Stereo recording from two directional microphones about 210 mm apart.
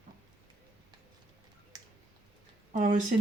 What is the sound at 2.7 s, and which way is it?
Speech, 40° right (ahead or behind).